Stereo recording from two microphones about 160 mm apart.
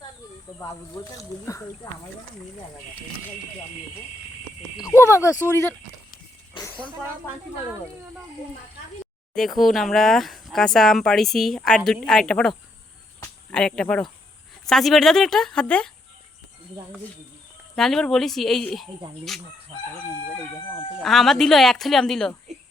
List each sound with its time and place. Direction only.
1.5 s speech: 20° left (ahead or behind)
4.8 s speech: 20° left (ahead or behind)
9.3 s speech: centre (ahead or behind)
17.7 s speech: 5° left (ahead or behind)
21.0 s speech: centre (ahead or behind)